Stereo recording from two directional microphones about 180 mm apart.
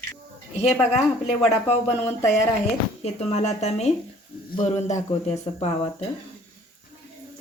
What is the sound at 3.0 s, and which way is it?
Speech, 35° left (ahead or behind).